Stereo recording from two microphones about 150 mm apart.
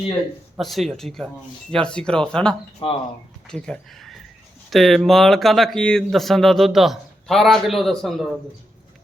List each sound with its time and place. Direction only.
0.6 s speech: centre (ahead or behind)
2.8 s speech: 35° left (ahead or behind)
3.5 s speech: 5° left (ahead or behind)